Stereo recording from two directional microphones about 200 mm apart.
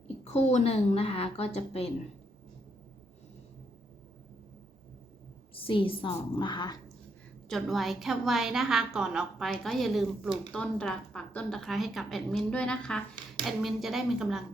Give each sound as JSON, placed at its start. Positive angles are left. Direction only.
{"t": 0.3, "sound": "a woman's voice", "side_deg": 35}
{"t": 5.5, "sound": "a woman's voice", "side_deg": 25}
{"t": 7.4, "sound": "a woman's voice", "side_deg": 0}